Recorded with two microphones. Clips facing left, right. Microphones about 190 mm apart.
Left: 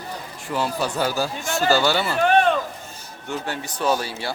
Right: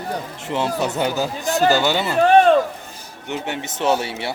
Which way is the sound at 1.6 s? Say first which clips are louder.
Even; 15° right (ahead or behind).